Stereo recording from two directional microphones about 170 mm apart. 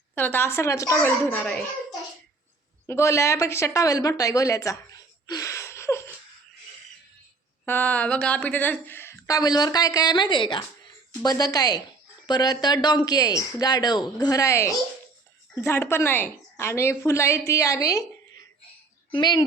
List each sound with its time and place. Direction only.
0.1 s a woman's voice: 10° left (ahead or behind)
2.8 s speech: 15° left (ahead or behind)
7.6 s a woman's voice: 10° left (ahead or behind)
19.1 s speech: 25° left (ahead or behind)